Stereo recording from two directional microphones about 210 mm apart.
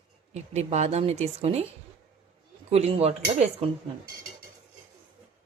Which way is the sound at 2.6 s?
30° right (ahead or behind).